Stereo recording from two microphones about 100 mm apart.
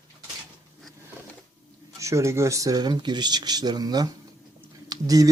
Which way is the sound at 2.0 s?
30° right (ahead or behind).